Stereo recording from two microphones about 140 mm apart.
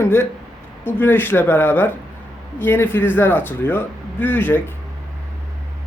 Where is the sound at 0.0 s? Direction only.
15° left (ahead or behind).